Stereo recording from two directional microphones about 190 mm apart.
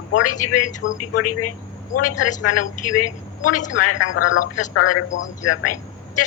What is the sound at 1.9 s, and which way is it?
A woman's voice, 45° left (ahead or behind).